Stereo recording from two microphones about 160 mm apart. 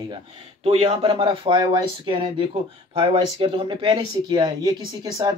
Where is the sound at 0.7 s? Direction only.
40° right (ahead or behind).